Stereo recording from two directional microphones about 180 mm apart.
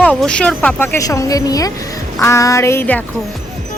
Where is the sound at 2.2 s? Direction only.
15° left (ahead or behind).